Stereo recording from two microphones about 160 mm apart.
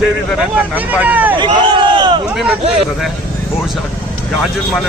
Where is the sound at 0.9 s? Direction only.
10° right (ahead or behind).